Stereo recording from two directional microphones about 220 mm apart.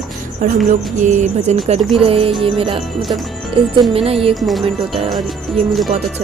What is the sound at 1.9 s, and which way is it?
Music, 25° right (ahead or behind).